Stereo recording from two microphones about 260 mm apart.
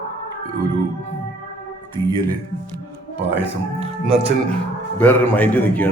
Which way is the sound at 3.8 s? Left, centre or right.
Right.